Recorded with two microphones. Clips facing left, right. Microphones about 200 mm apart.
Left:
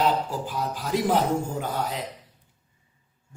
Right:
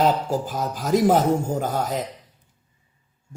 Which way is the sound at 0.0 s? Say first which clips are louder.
Right 4 dB; 45° right (ahead or behind).